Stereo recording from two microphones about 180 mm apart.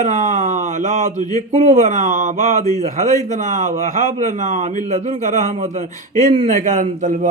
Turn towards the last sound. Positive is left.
turn(degrees=-45)  # may be behind; listen again after turning